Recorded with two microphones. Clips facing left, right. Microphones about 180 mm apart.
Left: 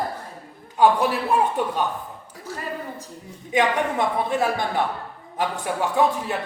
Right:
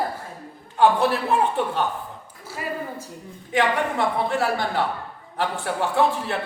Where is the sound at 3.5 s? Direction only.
20° left (ahead or behind).